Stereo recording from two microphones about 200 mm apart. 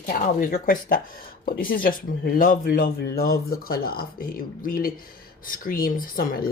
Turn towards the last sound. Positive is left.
turn(degrees=45)  # may be behind; listen again after turning